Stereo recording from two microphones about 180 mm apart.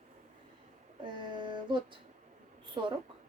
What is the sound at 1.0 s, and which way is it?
A woman's voice, 25° right (ahead or behind).